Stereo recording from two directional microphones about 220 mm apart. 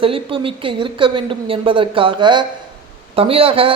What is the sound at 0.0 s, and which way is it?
A man's voice, 25° right (ahead or behind).